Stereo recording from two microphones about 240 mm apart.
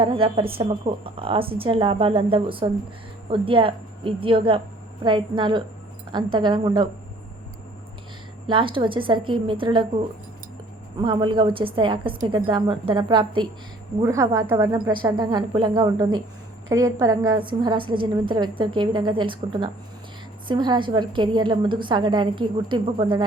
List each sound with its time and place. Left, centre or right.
0.0 s a woman's voice: right
8.4 s a woman's voice: right
11.0 s a woman's voice: centre